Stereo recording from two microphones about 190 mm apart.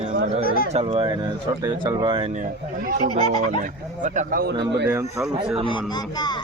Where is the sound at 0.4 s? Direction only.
50° left (ahead or behind).